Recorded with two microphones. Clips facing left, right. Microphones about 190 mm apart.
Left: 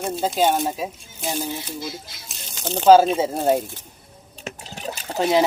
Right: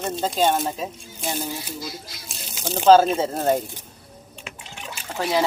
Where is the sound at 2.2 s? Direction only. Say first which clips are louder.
Left 1 dB; centre (ahead or behind).